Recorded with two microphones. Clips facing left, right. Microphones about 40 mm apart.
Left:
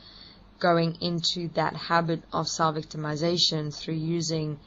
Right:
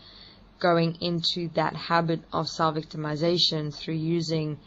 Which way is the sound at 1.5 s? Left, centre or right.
Right.